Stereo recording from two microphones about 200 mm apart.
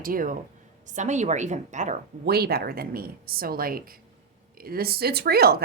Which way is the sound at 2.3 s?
50° right (ahead or behind).